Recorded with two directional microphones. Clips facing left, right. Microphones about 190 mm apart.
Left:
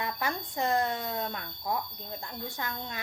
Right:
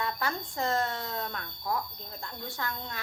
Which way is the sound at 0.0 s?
15° left (ahead or behind).